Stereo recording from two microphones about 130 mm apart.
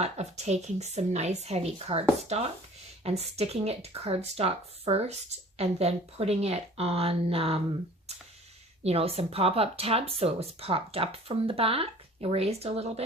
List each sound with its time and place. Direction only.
0.0 s a woman's voice: 55° right (ahead or behind)